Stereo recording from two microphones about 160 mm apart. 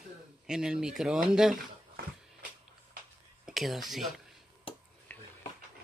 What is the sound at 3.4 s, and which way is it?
Speech, centre (ahead or behind).